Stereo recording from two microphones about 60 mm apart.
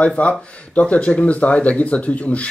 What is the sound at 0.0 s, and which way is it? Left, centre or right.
Speech, left.